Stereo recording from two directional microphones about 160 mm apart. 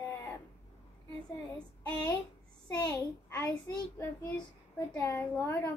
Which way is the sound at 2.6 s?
20° left (ahead or behind).